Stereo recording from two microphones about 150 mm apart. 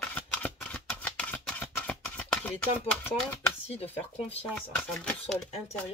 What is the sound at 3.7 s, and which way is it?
Speech, 40° left (ahead or behind).